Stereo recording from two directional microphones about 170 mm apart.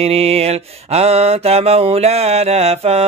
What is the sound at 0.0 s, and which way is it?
Mantra, 35° right (ahead or behind).